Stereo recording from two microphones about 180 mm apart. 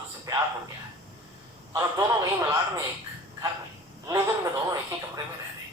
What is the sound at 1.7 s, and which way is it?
Speech, 15° right (ahead or behind).